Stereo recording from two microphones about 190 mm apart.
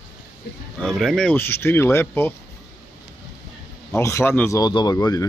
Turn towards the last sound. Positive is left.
turn(degrees=20)  # may be behind; listen again after turning